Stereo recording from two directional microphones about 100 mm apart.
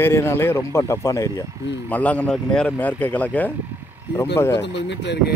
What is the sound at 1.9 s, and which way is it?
Speech, 15° left (ahead or behind).